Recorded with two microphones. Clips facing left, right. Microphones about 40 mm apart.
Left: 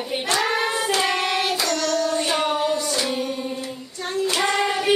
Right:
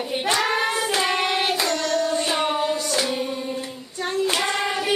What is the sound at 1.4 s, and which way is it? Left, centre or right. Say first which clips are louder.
Singing: even; centre.